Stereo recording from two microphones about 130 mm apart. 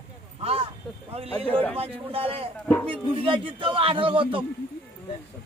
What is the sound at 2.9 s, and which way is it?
Speech, 45° right (ahead or behind).